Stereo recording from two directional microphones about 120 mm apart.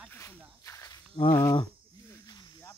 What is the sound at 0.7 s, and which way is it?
Walk, 25° left (ahead or behind).